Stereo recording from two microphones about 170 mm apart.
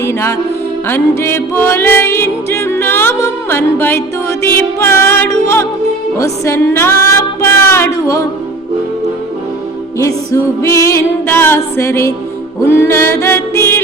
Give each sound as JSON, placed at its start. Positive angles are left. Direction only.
{"t": 0.0, "sound": "music", "side_deg": 15}
{"t": 10.0, "sound": "music", "side_deg": 15}